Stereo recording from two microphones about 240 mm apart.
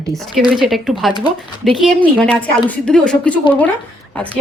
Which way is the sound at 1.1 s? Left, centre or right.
Centre.